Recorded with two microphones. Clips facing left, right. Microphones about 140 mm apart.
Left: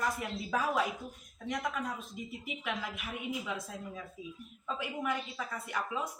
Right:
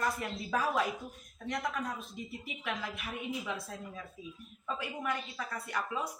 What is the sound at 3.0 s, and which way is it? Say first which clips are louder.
Speech: even; 15° left (ahead or behind).